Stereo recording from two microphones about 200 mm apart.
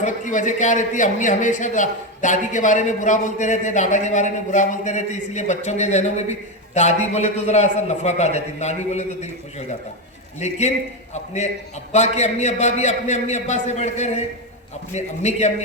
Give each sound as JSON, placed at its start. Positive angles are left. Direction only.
{"t": 0.0, "sound": "a man's voice", "side_deg": 40}